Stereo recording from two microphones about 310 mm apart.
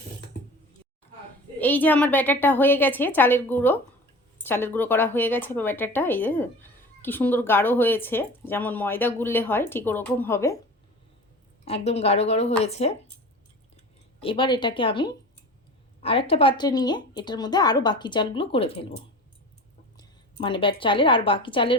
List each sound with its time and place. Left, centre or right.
1.5 s speech: centre
11.6 s speech: centre
14.2 s speech: centre
20.0 s a woman's voice: centre